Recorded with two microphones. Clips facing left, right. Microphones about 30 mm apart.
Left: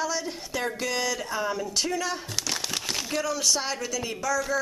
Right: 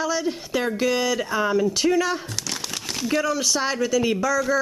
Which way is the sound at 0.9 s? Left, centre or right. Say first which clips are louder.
Right 6 dB; centre.